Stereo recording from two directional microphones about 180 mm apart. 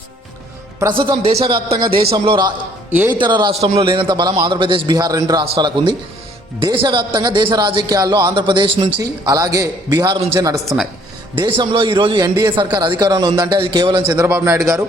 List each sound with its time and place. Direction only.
0.9 s a man's voice: 30° right (ahead or behind)
2.9 s a man's voice: 10° right (ahead or behind)
3.2 s a man's voice: 25° right (ahead or behind)
11.3 s a man's voice: 30° right (ahead or behind)
14.3 s a man's voice: 5° right (ahead or behind)